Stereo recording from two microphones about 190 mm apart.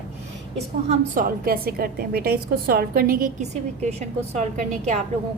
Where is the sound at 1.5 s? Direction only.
50° right (ahead or behind).